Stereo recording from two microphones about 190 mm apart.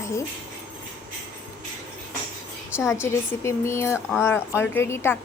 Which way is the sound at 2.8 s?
15° left (ahead or behind).